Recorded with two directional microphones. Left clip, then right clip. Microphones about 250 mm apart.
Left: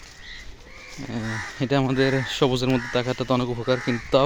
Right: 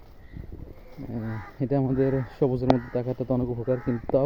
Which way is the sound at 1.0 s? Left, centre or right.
Left.